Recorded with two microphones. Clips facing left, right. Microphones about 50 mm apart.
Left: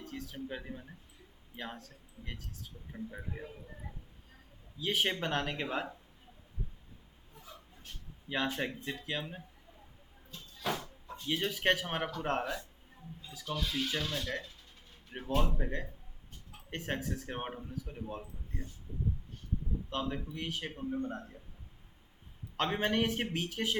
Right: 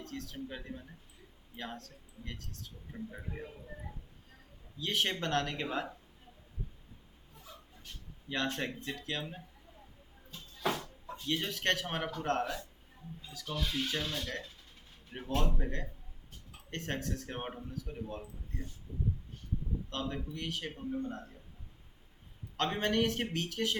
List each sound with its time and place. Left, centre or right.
0.0 s speech: centre
4.8 s speech: centre
8.3 s speech: centre
10.7 s a sound: centre
11.3 s speech: centre
13.6 s speech: centre
19.9 s speech: centre
22.5 s speech: centre